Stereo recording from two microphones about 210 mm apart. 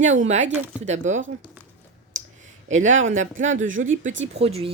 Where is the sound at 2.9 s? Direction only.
65° right (ahead or behind).